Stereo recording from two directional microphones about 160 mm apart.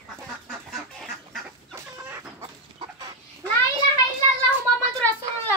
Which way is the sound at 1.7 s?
15° right (ahead or behind).